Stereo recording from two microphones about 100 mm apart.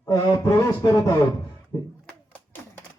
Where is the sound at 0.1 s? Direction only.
35° left (ahead or behind).